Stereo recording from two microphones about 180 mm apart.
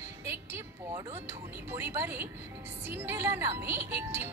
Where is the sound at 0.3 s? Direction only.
15° right (ahead or behind).